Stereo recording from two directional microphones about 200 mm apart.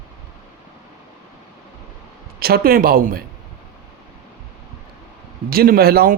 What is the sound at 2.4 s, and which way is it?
Speech, 50° right (ahead or behind).